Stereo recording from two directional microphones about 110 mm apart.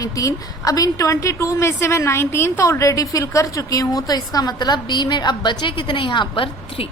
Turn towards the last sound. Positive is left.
turn(degrees=50)  # may be behind; listen again after turning